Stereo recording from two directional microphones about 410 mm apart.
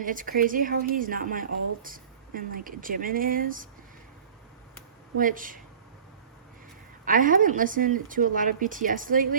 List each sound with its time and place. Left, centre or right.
0.0 s speech: centre
5.1 s speech: centre
7.0 s speech: centre